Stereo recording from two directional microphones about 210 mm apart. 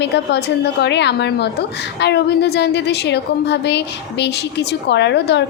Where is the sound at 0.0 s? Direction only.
55° left (ahead or behind).